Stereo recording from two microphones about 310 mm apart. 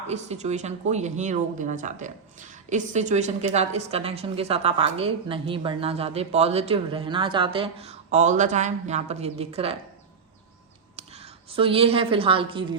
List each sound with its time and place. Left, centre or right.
0.1 s speech: right
10.9 s a woman's voice: centre